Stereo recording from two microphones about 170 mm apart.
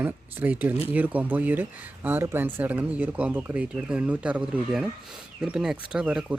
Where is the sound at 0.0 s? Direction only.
10° right (ahead or behind).